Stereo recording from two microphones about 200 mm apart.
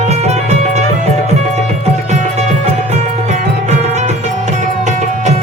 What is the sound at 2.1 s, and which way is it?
Music, 35° right (ahead or behind).